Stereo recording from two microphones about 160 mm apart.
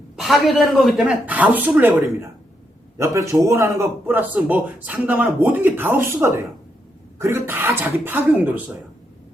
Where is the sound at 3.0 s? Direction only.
20° right (ahead or behind).